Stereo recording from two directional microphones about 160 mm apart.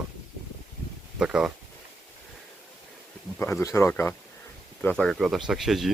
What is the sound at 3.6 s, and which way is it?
Speech, 20° left (ahead or behind).